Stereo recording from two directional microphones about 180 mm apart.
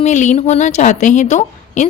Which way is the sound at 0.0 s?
40° left (ahead or behind).